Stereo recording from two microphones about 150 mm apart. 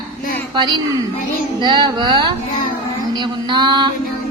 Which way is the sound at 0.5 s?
30° right (ahead or behind).